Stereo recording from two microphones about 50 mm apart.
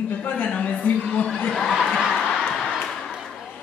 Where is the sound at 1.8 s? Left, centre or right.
Centre.